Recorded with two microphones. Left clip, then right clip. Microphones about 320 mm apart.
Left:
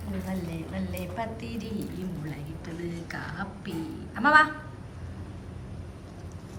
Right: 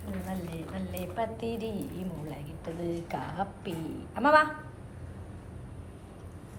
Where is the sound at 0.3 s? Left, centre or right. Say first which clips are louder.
Left 3 dB; centre.